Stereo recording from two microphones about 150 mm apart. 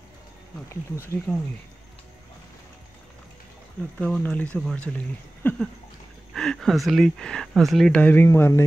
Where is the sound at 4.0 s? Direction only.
10° left (ahead or behind).